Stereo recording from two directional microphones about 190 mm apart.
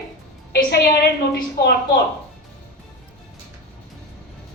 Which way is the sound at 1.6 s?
60° left (ahead or behind).